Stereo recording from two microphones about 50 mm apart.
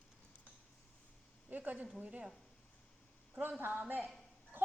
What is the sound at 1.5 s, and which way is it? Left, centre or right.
Speech, right.